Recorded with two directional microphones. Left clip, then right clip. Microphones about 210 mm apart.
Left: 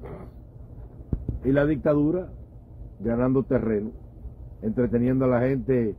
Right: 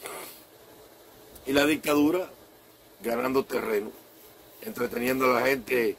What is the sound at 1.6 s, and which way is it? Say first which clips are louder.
Speech: even; 20° right (ahead or behind).